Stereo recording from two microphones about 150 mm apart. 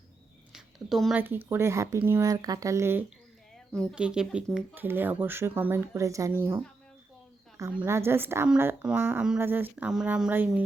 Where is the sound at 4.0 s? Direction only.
5° right (ahead or behind).